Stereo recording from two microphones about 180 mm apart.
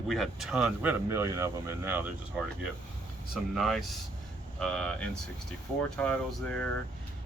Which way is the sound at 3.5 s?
Centre (ahead or behind).